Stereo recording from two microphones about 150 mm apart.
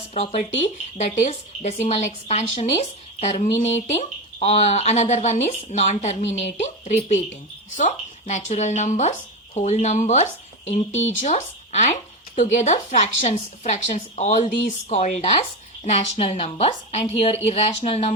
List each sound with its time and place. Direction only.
0.1 s speech: 45° left (ahead or behind)